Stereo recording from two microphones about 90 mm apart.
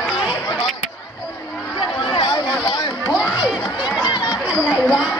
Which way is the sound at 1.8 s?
65° left (ahead or behind).